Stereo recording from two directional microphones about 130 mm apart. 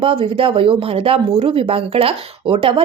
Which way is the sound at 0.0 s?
45° right (ahead or behind).